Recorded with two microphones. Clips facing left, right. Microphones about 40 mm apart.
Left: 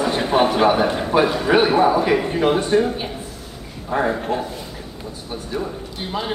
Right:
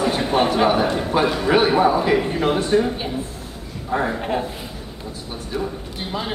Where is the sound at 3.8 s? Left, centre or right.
Centre.